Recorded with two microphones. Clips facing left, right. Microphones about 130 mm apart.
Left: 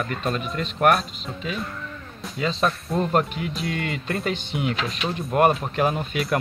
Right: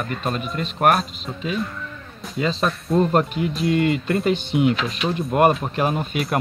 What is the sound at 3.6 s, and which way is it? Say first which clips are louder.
Speech: right 11 dB; 25° right (ahead or behind).